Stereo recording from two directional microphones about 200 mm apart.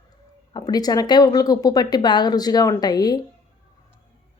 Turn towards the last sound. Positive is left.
turn(degrees=20)  # may be behind; listen again after turning